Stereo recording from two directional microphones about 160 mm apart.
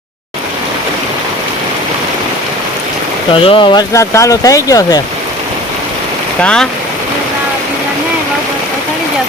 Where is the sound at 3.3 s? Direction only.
35° left (ahead or behind).